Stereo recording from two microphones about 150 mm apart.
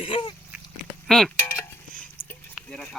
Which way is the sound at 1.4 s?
15° left (ahead or behind).